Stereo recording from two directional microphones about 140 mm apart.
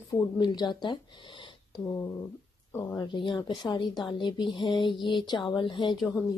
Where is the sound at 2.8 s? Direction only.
25° left (ahead or behind).